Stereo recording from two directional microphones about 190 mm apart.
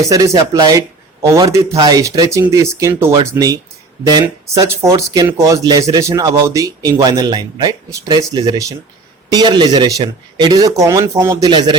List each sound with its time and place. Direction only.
0.0 s speech: 15° right (ahead or behind)